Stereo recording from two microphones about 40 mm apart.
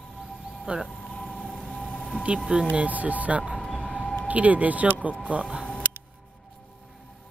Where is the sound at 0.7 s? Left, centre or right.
Right.